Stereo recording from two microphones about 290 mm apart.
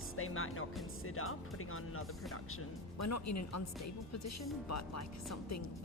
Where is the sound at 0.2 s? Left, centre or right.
Left.